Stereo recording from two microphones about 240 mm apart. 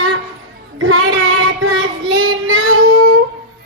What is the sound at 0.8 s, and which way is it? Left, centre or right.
Child singing, right.